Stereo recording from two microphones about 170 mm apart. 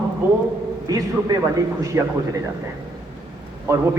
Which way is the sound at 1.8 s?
20° right (ahead or behind).